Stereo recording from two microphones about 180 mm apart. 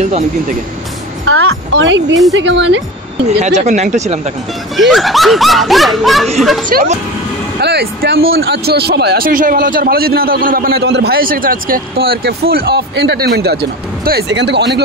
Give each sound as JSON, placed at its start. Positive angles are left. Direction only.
{"t": 0.0, "sound": "speech", "side_deg": -40}
{"t": 1.2, "sound": "a woman's voice", "side_deg": -90}
{"t": 3.3, "sound": "speech", "side_deg": -40}
{"t": 4.7, "sound": "speech", "side_deg": 0}
{"t": 6.7, "sound": "speech", "side_deg": -50}
{"t": 7.6, "sound": "speech", "side_deg": -65}